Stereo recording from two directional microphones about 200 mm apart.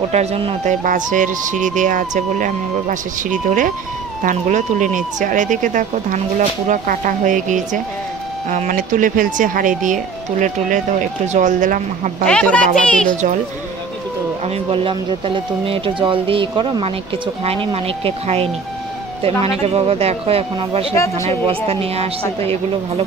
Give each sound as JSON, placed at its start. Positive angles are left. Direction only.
{"t": 0.1, "sound": "speech", "side_deg": -30}
{"t": 0.8, "sound": "speech", "side_deg": -40}
{"t": 12.3, "sound": "speech", "side_deg": 5}
{"t": 14.4, "sound": "speech", "side_deg": -30}
{"t": 20.9, "sound": "speech", "side_deg": 15}
{"t": 21.5, "sound": "speech", "side_deg": -30}